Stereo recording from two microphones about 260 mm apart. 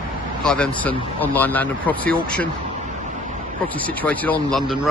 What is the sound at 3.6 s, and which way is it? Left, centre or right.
Speech, centre.